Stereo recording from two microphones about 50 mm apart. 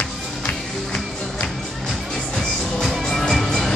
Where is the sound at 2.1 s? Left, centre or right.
Centre.